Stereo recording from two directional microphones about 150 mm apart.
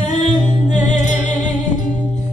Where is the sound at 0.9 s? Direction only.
55° left (ahead or behind).